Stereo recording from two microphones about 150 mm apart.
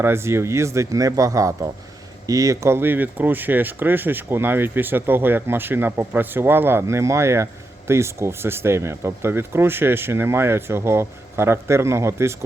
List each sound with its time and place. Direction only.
0.0 s a man's voice: 15° right (ahead or behind)